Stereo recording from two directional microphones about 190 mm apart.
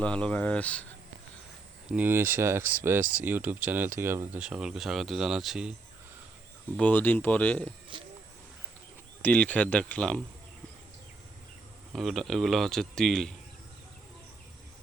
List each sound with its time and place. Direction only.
0.0 s speech: 5° left (ahead or behind)
1.9 s speech: 10° right (ahead or behind)
6.7 s speech: 10° left (ahead or behind)
7.9 s a sound: 25° right (ahead or behind)
9.2 s speech: 5° left (ahead or behind)
11.9 s speech: centre (ahead or behind)